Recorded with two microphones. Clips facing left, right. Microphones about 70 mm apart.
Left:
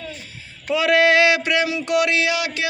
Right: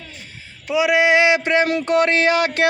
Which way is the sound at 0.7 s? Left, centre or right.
Centre.